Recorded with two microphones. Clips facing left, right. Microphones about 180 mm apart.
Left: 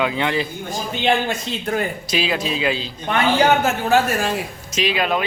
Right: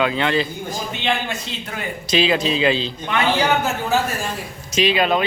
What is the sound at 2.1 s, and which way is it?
Speech, 5° left (ahead or behind).